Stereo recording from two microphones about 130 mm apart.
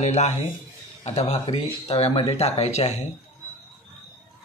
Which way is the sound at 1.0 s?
50° left (ahead or behind).